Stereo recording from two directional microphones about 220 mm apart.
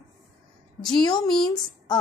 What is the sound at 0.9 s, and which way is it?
Speech, 20° left (ahead or behind).